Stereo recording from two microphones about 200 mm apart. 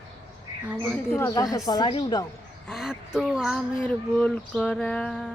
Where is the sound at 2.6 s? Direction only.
Centre (ahead or behind).